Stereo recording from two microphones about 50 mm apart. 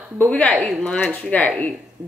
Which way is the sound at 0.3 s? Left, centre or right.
Left.